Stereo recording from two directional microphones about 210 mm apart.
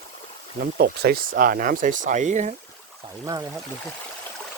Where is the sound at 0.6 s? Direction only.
45° right (ahead or behind).